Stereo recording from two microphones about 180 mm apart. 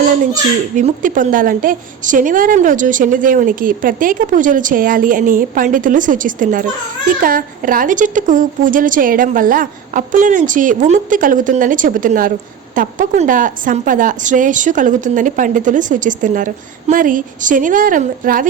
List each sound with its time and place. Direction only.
0.8 s a woman's voice: 45° right (ahead or behind)